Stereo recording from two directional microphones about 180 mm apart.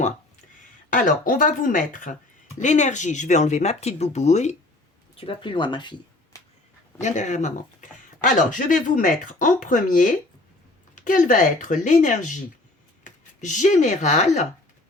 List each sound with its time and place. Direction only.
0.9 s speech: 50° left (ahead or behind); by 6.4 s 25° left (ahead or behind)
7.0 s speech: 40° left (ahead or behind)